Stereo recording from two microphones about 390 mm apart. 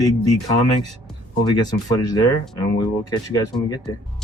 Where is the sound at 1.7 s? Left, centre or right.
Centre.